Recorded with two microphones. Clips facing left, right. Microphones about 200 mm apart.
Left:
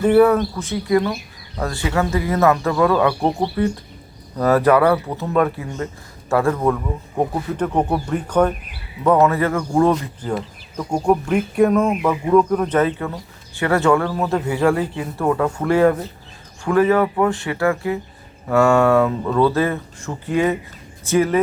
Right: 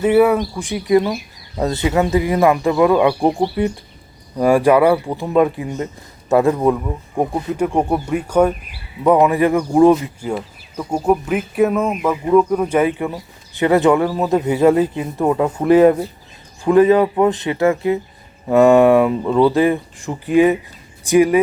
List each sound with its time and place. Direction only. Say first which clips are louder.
0.0 s speech: even; 10° right (ahead or behind)